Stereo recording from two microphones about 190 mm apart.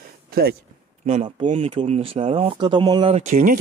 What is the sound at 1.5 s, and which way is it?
Speech, 30° right (ahead or behind).